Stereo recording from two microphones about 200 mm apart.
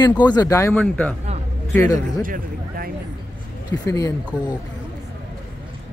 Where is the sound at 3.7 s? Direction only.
20° left (ahead or behind).